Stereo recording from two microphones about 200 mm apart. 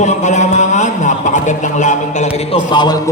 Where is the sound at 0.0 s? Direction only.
35° left (ahead or behind).